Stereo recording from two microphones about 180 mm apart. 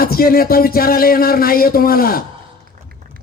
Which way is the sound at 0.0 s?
55° left (ahead or behind).